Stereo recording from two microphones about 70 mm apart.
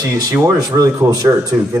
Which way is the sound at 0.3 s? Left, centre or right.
Right.